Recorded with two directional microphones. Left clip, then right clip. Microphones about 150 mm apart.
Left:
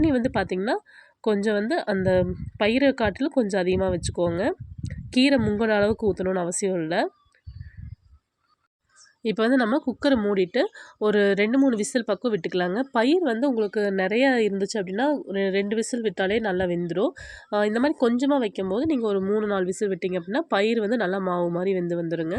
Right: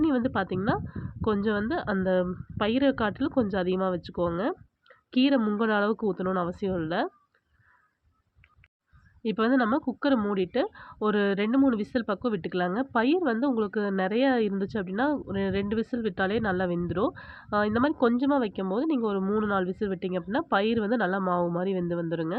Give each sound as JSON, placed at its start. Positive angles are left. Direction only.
{"t": 0.0, "sound": "a woman's voice", "side_deg": 20}
{"t": 9.2, "sound": "speech", "side_deg": 20}